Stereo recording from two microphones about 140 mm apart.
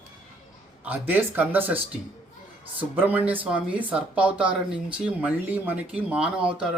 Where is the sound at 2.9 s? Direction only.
15° right (ahead or behind).